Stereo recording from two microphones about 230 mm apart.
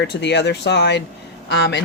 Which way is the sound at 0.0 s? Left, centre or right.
Left.